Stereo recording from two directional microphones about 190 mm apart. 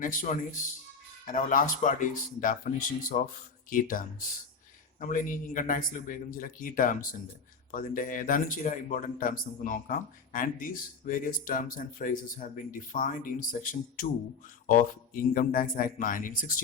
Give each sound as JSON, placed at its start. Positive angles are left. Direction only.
{"t": 0.0, "sound": "speech", "side_deg": 45}